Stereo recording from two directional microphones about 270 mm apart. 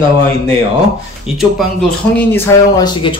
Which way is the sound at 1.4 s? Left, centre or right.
Centre.